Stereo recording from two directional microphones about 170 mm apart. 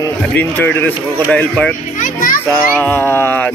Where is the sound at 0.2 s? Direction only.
10° left (ahead or behind).